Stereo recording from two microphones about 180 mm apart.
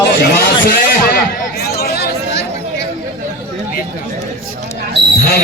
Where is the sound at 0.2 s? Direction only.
60° left (ahead or behind).